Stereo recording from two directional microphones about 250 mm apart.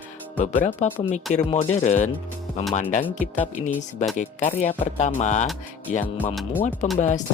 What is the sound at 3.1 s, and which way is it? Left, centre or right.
Speech, left.